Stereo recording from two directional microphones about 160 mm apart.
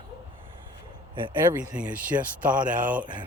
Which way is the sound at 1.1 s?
30° right (ahead or behind).